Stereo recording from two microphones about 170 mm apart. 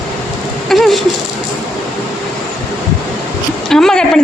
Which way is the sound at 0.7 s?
Centre (ahead or behind).